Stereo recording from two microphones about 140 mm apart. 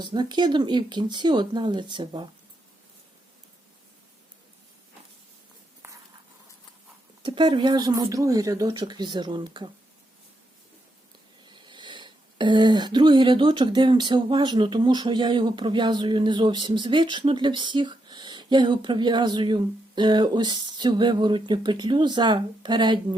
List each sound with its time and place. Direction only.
0.0 s speech: 30° right (ahead or behind)
7.2 s speech: 35° right (ahead or behind)
11.4 s speech: 35° right (ahead or behind)